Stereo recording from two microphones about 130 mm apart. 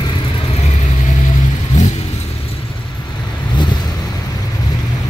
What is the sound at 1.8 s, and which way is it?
Vehicle, 70° left (ahead or behind).